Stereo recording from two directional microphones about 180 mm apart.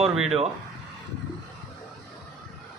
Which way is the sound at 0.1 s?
5° right (ahead or behind).